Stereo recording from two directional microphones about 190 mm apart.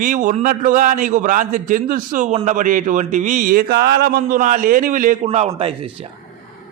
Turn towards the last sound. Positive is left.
turn(degrees=-30)  # may be behind; listen again after turning